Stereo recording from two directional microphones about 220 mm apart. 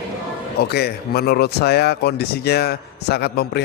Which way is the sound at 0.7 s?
45° left (ahead or behind).